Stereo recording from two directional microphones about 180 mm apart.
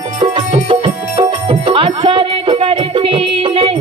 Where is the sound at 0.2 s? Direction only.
30° right (ahead or behind).